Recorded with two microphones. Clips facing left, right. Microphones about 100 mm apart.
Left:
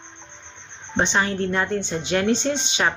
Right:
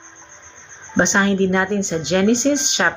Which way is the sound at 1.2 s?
55° right (ahead or behind).